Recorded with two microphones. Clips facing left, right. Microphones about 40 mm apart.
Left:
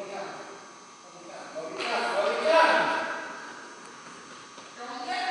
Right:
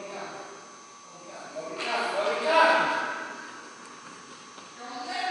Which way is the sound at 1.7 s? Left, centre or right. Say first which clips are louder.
Even; centre.